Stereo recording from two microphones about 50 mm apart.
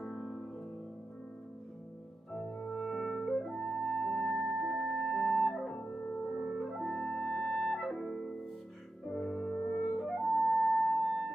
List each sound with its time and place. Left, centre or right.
0.0 s music: centre
2.4 s music: centre
2.8 s clarinet: centre
3.4 s music: centre
5.8 s music: left
6.3 s clarinet: centre
9.0 s music: centre
9.8 s flute: centre
10.6 s music: centre